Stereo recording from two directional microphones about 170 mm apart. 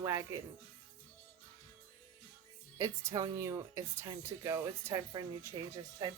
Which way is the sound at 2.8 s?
20° right (ahead or behind).